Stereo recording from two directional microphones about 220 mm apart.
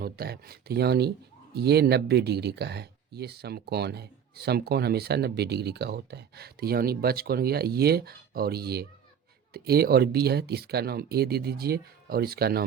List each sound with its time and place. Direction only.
0.0 s speech: 45° right (ahead or behind)